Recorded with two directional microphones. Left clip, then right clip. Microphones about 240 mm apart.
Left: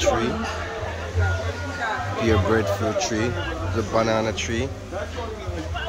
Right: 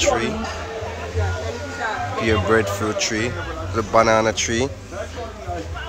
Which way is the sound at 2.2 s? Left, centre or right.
Centre.